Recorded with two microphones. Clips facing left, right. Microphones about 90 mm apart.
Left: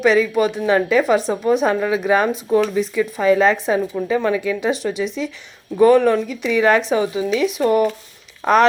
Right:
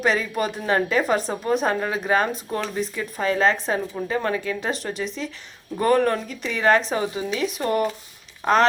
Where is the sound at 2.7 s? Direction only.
35° right (ahead or behind).